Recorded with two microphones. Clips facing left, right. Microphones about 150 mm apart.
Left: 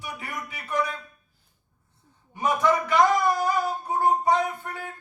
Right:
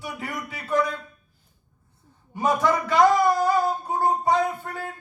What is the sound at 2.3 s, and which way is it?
Music, 30° right (ahead or behind).